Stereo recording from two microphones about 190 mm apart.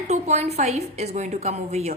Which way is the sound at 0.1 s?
35° right (ahead or behind).